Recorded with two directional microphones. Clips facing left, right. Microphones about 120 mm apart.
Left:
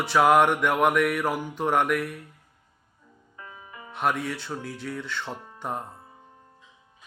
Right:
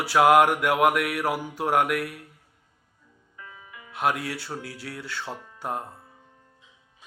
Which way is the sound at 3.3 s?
30° left (ahead or behind).